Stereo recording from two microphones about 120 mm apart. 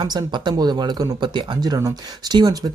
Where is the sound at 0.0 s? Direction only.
35° right (ahead or behind).